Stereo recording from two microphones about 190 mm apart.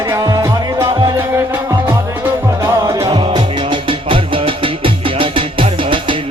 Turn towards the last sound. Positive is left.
turn(degrees=-25)  # may be behind; listen again after turning